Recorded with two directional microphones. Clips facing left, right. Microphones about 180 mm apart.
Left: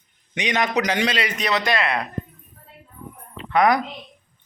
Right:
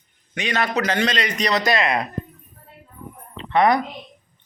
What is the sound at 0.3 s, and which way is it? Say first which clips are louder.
A man's voice: left 1 dB; 15° left (ahead or behind).